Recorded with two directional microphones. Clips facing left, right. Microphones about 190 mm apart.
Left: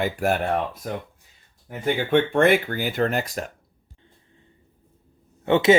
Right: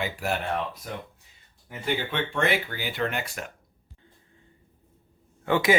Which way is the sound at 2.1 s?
50° left (ahead or behind).